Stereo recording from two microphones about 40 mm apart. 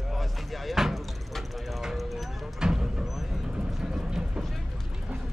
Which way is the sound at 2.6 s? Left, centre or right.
Centre.